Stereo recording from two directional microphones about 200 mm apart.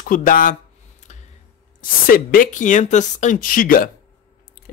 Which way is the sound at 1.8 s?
45° left (ahead or behind).